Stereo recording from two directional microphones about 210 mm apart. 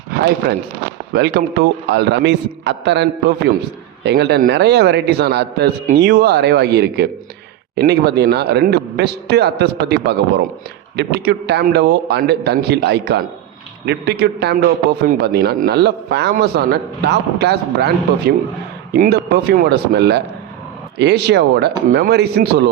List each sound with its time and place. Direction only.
1.1 s a man's voice: 50° right (ahead or behind)